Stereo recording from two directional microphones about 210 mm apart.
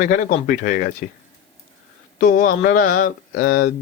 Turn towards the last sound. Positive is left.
turn(degrees=45)  # may be behind; listen again after turning